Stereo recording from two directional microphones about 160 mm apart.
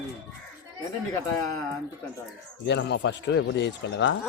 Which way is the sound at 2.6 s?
90° left.